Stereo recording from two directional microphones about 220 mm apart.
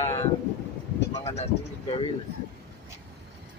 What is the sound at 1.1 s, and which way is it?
Speech, 30° left (ahead or behind).